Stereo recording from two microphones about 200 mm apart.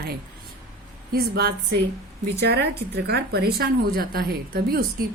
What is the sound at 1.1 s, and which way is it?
A woman's voice, 50° right (ahead or behind).